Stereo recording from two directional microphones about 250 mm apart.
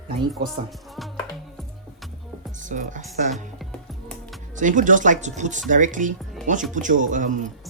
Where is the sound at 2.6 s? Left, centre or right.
Right.